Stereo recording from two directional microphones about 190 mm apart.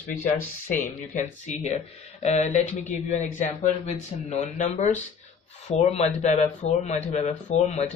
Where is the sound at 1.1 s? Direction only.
40° left (ahead or behind).